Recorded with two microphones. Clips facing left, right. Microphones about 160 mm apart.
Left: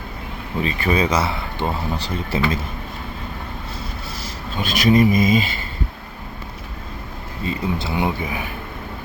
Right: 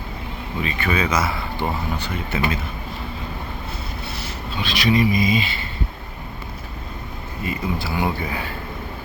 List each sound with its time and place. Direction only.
0.6 s speech: 35° left (ahead or behind)
1.3 s speech: 20° left (ahead or behind)
2.0 s speech: 35° left (ahead or behind)
4.5 s speech: 45° left (ahead or behind)
7.4 s speech: 25° left (ahead or behind)